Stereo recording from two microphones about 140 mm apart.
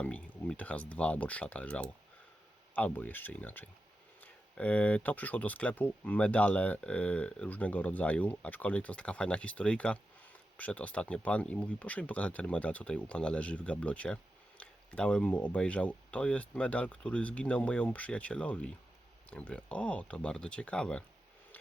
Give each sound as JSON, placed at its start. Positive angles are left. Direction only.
{"t": 0.0, "sound": "speech", "side_deg": 10}